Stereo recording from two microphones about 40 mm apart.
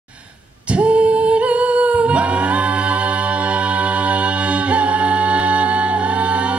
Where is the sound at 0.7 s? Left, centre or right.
Right.